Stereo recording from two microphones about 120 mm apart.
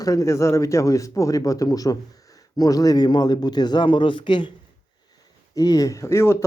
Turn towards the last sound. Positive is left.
turn(degrees=20)  # may be behind; listen again after turning